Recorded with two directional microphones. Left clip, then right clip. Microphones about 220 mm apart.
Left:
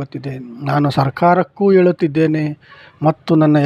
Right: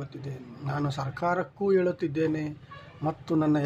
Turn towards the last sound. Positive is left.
turn(degrees=40)  # may be behind; listen again after turning